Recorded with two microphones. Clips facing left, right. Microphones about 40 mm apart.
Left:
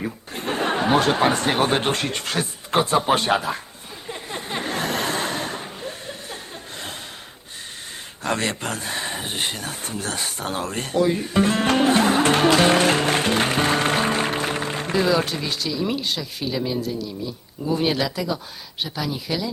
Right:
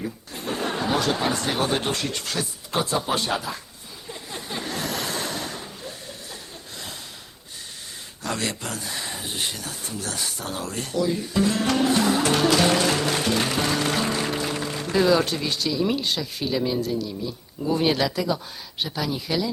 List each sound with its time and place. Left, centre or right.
0.0 s speech: left
4.1 s a sound: left
8.2 s speech: left
15.1 s speech: centre